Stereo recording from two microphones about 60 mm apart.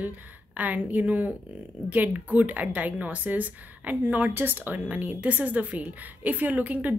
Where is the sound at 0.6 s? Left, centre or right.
Right.